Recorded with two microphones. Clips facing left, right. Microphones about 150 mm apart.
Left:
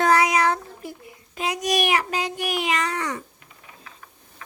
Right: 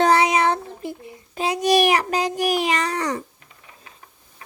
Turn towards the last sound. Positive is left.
turn(degrees=-35)  # may be behind; listen again after turning